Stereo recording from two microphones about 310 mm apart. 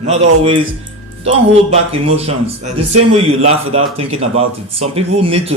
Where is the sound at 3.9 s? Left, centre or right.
Centre.